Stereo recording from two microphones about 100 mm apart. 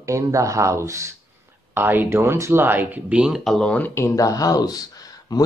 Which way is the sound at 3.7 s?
20° left (ahead or behind).